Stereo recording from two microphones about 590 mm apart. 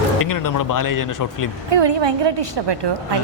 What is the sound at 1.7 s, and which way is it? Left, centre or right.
A woman's voice, right.